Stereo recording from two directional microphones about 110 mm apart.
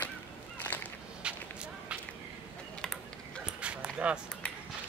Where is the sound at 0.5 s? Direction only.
15° left (ahead or behind).